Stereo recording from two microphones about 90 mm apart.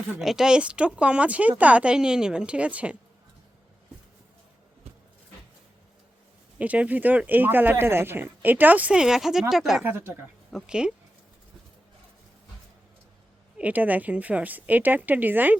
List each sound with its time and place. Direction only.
0.2 s speech: 5° right (ahead or behind)
6.6 s speech: 15° right (ahead or behind)
9.8 s speech: 25° right (ahead or behind)
10.5 s speech: 10° right (ahead or behind)
13.6 s speech: 15° right (ahead or behind)